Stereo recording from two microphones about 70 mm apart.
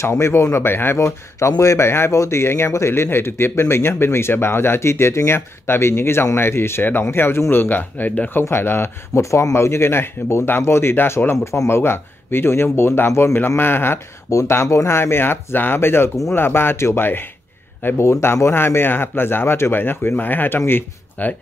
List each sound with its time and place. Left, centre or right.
0.0 s speech: left
8.3 s speech: left
11.4 s speech: left
11.8 s speech: left